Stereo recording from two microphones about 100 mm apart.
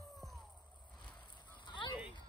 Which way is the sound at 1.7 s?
55° left (ahead or behind).